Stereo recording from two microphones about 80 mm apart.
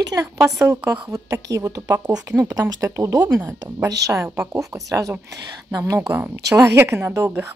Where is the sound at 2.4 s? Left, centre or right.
Right.